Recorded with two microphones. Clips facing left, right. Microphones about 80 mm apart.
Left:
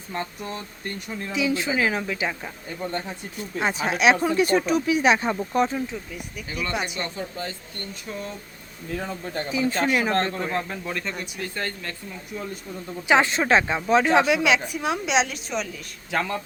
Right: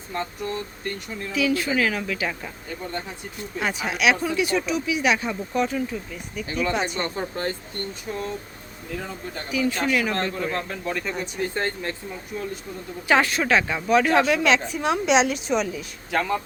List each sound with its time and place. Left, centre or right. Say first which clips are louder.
0.1 s speech: right 2 dB; centre
3.6 s speech: left 2 dB; left
5.9 s speech: right 2 dB; centre
6.9 s speech: right 3 dB; right
9.5 s speech: even; left
10.5 s a man's voice: even; centre
10.9 s speech: right 1 dB; centre
11.2 s speech: right 4 dB; right
13.1 s speech: left 1 dB; left; by 16.4 s centre